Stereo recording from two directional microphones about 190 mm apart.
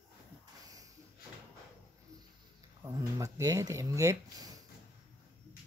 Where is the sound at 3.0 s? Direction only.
15° right (ahead or behind).